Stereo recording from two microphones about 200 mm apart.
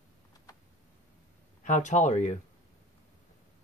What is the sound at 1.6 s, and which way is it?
Speech, 40° left (ahead or behind).